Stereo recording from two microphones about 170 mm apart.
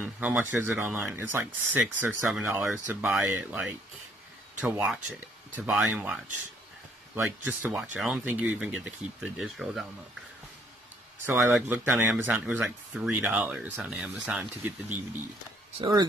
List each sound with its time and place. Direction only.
0.0 s speech: 10° right (ahead or behind)
7.2 s speech: 10° right (ahead or behind)
11.2 s speech: 5° right (ahead or behind)
15.8 s speech: 25° right (ahead or behind)